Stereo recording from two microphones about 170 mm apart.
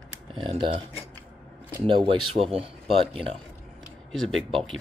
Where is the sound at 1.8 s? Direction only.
30° right (ahead or behind).